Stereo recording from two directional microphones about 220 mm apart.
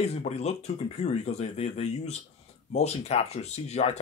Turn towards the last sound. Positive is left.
turn(degrees=30)  # may be behind; listen again after turning